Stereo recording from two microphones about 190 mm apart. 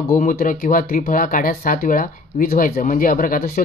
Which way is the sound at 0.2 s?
45° left (ahead or behind).